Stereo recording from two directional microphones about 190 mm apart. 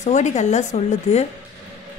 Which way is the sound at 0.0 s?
40° left (ahead or behind).